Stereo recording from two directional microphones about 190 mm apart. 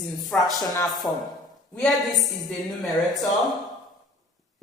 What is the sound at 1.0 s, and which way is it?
Speech, 15° left (ahead or behind).